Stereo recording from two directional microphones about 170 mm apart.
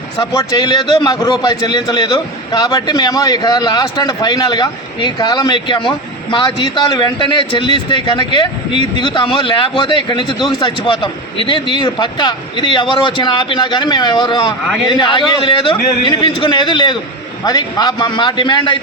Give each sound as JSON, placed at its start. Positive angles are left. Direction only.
{"t": 0.2, "sound": "a man's voice", "side_deg": 25}